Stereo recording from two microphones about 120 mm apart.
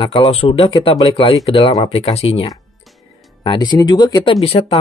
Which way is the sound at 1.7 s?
60° left (ahead or behind).